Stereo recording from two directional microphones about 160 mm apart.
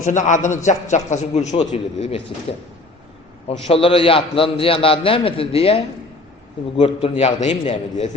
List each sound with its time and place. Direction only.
0.0 s a man's voice: 50° left (ahead or behind)
3.7 s a man's voice: 35° left (ahead or behind)